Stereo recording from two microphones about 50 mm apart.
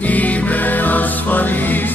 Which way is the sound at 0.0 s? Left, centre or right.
Left.